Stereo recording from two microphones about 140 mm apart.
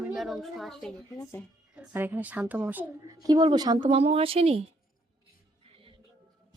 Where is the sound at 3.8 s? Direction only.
45° right (ahead or behind).